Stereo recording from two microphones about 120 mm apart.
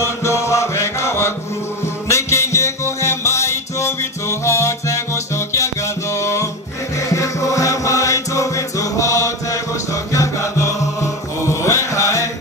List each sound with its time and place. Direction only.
0.0 s music: 25° left (ahead or behind)
10.1 s mantra: 25° left (ahead or behind)